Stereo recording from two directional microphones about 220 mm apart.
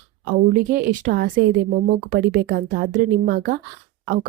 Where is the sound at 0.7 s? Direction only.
40° right (ahead or behind).